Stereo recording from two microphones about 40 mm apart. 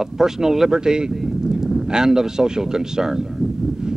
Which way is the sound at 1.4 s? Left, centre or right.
Centre.